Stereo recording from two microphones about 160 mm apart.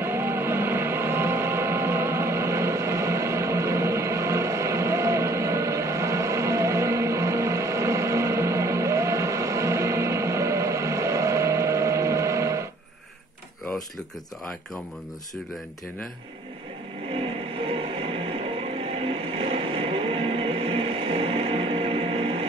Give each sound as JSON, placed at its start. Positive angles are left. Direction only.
{"t": 0.0, "sound": "music", "side_deg": -15}
{"t": 17.6, "sound": "music", "side_deg": -35}
{"t": 19.0, "sound": "a sound", "side_deg": -35}